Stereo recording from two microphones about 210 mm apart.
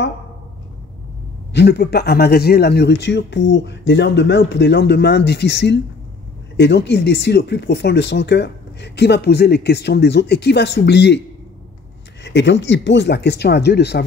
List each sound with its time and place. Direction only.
1.5 s speech: 55° left (ahead or behind)
12.2 s speech: 55° left (ahead or behind)